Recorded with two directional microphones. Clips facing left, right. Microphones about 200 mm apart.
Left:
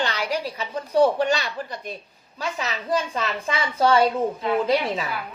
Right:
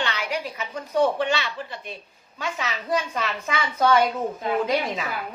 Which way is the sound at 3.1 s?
30° left (ahead or behind).